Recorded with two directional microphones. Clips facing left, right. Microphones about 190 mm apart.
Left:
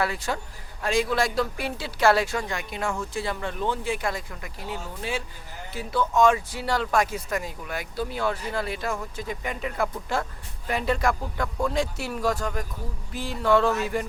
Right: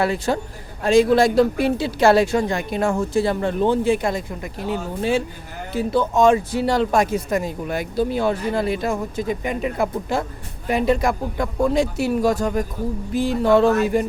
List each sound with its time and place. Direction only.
0.0 s a man's voice: 25° right (ahead or behind)